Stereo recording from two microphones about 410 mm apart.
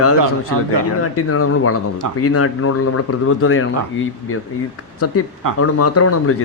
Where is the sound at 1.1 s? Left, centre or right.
Left.